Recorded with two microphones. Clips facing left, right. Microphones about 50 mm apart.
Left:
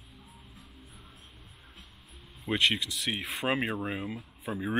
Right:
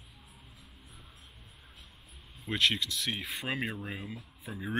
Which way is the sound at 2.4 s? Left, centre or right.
Centre.